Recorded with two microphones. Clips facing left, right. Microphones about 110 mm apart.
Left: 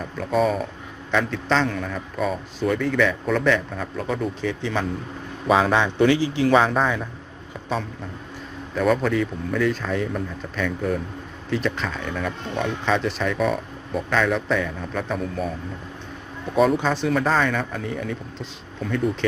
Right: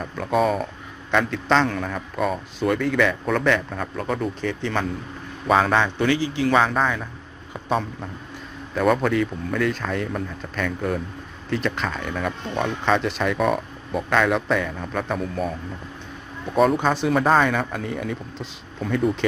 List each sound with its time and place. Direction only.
0.0 s a man's voice: centre (ahead or behind)
6.0 s a man's voice: 25° left (ahead or behind)
6.7 s speech: 5° left (ahead or behind)
8.7 s speech: centre (ahead or behind)
16.6 s speech: centre (ahead or behind)
17.2 s speech: 20° right (ahead or behind)
17.5 s speech: 5° right (ahead or behind)